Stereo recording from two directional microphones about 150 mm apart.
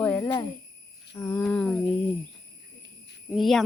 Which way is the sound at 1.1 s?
20° left (ahead or behind).